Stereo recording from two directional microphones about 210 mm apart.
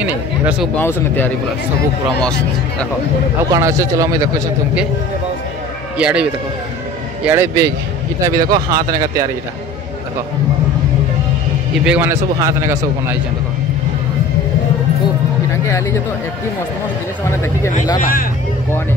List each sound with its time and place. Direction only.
0.0 s speech: 5° right (ahead or behind)
0.7 s speech: 10° left (ahead or behind)
3.5 s a man's voice: 15° right (ahead or behind)
5.9 s speech: 5° right (ahead or behind)
7.2 s a man's voice: 10° right (ahead or behind)
11.7 s a man's voice: 5° right (ahead or behind)
15.6 s speech: 15° left (ahead or behind)